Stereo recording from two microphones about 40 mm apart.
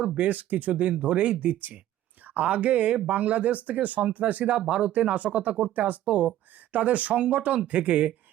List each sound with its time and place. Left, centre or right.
0.3 s speech: right
2.2 s a sound: right
2.5 s speech: right
4.5 s speech: right